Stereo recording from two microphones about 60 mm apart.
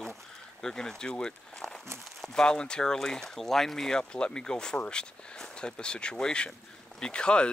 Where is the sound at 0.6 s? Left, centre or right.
Centre.